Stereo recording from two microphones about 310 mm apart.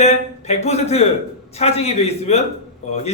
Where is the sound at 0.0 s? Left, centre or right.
Left.